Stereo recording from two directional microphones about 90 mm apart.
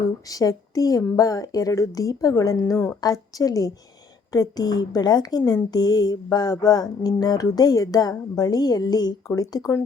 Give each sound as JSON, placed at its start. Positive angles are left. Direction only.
{"t": 0.3, "sound": "speech", "side_deg": 40}